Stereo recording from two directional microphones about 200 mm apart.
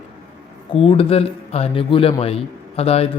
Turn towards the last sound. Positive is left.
turn(degrees=30)  # may be behind; listen again after turning